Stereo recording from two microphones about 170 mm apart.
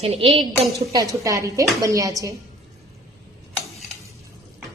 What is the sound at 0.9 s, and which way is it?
A woman's voice, 20° right (ahead or behind).